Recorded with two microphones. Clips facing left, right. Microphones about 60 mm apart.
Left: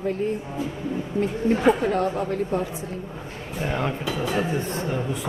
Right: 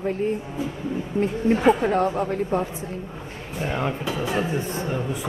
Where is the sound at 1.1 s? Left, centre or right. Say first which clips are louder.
Right 1 dB; right.